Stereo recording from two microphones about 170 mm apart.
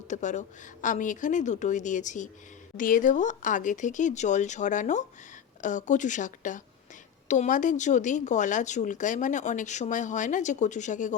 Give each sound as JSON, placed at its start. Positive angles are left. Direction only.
{"t": 0.1, "sound": "speech", "side_deg": 45}